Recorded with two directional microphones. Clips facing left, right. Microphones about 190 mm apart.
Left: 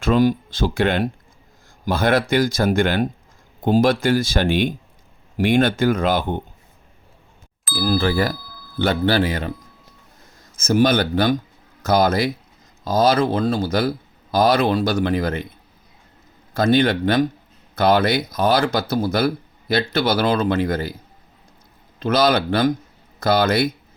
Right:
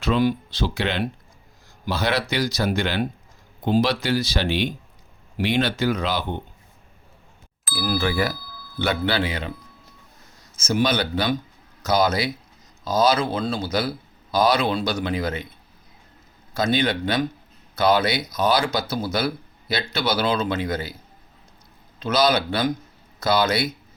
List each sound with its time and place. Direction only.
0.0 s speech: 45° left (ahead or behind)
7.7 s speech: centre (ahead or behind)
8.8 s speech: 45° left (ahead or behind)
10.7 s speech: 50° left (ahead or behind)
12.8 s speech: 50° left (ahead or behind)
16.6 s speech: 55° left (ahead or behind)
21.9 s speech: 55° left (ahead or behind)